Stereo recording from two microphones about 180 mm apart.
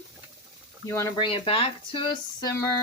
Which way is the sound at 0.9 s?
15° left (ahead or behind).